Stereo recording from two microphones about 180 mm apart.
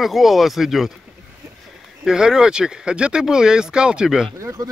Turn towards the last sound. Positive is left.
turn(degrees=-15)  # may be behind; listen again after turning